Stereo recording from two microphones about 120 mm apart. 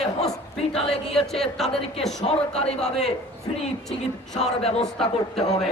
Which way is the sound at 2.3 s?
55° left (ahead or behind).